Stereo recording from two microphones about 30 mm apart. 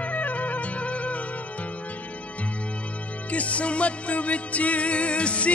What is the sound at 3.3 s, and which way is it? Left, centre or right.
Music, left.